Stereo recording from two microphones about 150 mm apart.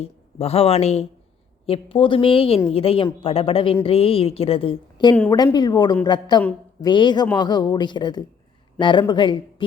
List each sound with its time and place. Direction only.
0.0 s a woman's voice: 40° left (ahead or behind)